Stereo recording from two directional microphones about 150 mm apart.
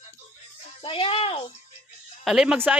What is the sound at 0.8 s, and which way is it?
Speech, 35° left (ahead or behind).